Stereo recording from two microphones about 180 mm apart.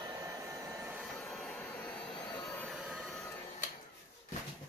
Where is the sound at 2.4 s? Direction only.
10° left (ahead or behind).